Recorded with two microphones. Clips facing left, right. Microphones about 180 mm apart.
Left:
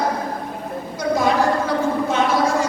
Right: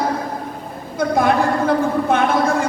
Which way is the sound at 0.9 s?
55° right (ahead or behind).